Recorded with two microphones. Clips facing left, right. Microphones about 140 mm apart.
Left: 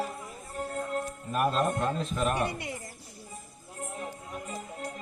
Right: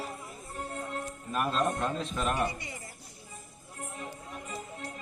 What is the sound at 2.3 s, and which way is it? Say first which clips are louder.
Speech: left 1 dB; 65° left (ahead or behind).